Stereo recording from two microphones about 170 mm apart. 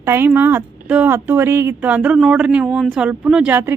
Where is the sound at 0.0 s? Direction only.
15° right (ahead or behind).